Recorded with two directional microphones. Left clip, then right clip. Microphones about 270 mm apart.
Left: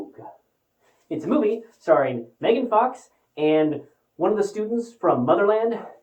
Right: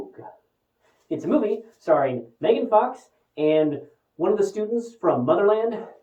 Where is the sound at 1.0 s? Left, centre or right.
Centre.